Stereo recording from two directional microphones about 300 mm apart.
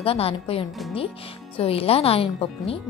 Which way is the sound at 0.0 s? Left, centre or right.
Centre.